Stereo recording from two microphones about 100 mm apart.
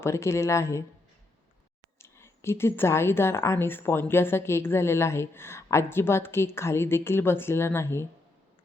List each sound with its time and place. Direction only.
0.0 s a woman's voice: 25° left (ahead or behind)
2.0 s a woman's voice: 25° left (ahead or behind)